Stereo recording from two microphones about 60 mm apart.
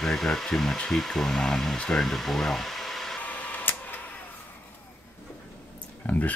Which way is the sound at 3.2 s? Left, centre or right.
Left.